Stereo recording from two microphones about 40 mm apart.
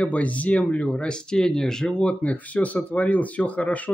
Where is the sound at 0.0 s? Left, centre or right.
Left.